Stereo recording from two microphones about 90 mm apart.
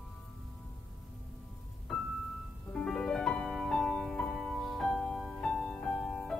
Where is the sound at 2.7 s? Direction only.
10° left (ahead or behind).